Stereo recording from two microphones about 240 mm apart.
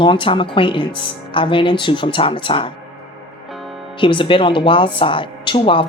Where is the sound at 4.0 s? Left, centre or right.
Left.